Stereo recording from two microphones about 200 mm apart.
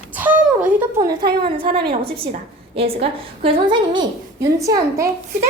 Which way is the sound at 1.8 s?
25° right (ahead or behind).